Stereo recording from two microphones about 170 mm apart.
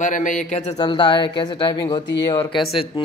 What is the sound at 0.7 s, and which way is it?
Speech, 25° left (ahead or behind).